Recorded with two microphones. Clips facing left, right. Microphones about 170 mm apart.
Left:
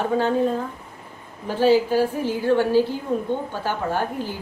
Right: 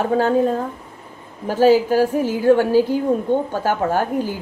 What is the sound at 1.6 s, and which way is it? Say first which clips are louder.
A woman's voice: right 4 dB; 45° right (ahead or behind).